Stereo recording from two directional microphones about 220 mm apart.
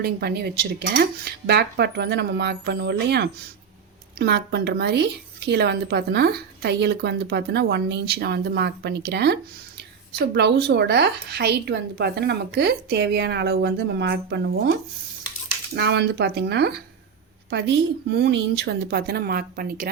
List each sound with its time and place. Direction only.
0.0 s a woman's voice: 45° right (ahead or behind)